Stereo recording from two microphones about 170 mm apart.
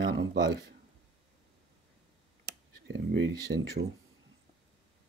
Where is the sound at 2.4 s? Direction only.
80° right.